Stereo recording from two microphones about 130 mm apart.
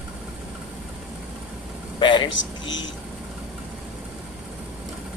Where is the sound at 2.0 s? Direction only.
40° left (ahead or behind).